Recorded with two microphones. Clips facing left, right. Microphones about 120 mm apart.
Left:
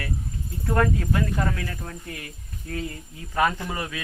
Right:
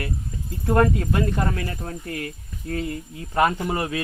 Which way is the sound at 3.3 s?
25° right (ahead or behind).